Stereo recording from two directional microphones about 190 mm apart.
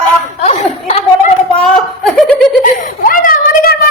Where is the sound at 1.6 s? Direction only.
5° left (ahead or behind).